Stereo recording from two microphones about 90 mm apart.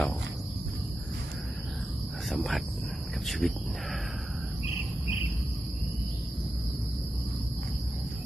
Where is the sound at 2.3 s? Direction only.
Centre (ahead or behind).